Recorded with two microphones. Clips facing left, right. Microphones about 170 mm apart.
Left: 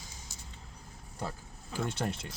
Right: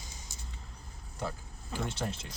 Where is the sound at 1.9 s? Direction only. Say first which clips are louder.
Left 2 dB; 55° left (ahead or behind).